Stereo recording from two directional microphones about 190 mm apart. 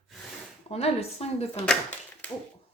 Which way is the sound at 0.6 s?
35° left (ahead or behind).